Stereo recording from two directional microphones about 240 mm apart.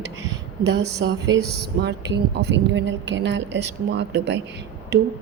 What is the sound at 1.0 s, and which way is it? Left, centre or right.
A woman's voice, right.